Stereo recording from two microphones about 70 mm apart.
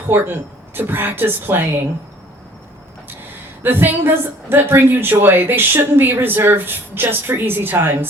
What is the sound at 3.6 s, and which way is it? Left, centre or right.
A woman's voice, right.